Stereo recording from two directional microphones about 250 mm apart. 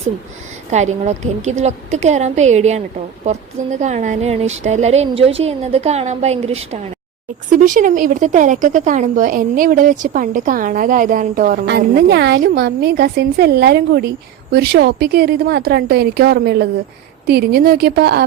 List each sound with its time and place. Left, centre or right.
0.7 s a woman's voice: right